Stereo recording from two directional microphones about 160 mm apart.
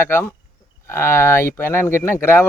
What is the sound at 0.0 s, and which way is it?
Speech, 15° left (ahead or behind).